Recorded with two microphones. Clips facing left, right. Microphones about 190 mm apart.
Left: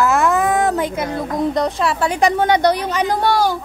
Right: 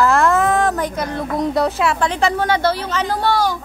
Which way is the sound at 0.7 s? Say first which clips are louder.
Left 2 dB; 20° left (ahead or behind).